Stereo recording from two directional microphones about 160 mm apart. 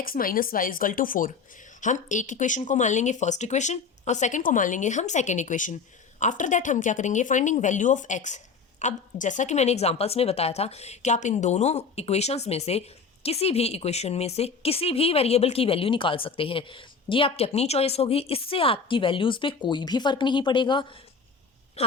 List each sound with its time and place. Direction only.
0.0 s a woman's voice: 60° left (ahead or behind); by 21.9 s 40° left (ahead or behind)